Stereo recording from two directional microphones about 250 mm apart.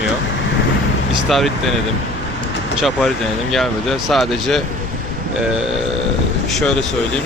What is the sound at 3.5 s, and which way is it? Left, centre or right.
Speech, centre.